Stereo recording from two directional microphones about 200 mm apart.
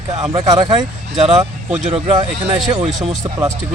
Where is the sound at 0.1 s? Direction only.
20° right (ahead or behind).